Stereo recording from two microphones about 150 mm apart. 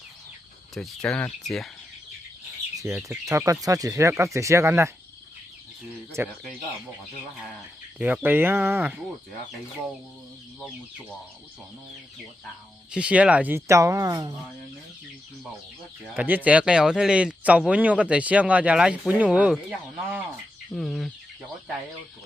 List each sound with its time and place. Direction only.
0.7 s speech: 5° left (ahead or behind)
2.7 s speech: 20° right (ahead or behind)
6.2 s speech: 15° right (ahead or behind)
7.9 s speech: 10° right (ahead or behind)
12.9 s speech: 5° right (ahead or behind); by 14.3 s 25° right (ahead or behind)
16.1 s speech: 10° right (ahead or behind)
20.7 s speech: centre (ahead or behind)